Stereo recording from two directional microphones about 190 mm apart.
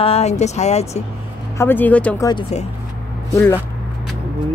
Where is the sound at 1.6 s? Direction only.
10° left (ahead or behind).